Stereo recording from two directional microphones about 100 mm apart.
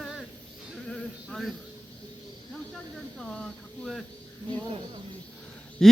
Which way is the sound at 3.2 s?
5° left (ahead or behind).